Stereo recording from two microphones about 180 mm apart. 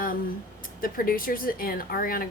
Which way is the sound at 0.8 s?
50° left (ahead or behind).